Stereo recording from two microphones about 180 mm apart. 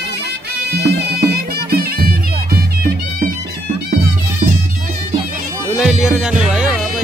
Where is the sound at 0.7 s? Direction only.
65° right (ahead or behind).